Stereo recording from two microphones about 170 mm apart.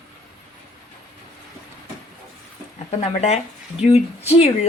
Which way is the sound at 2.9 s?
40° left (ahead or behind).